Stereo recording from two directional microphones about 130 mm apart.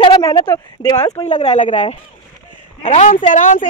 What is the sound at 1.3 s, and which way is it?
Speech, 60° left (ahead or behind).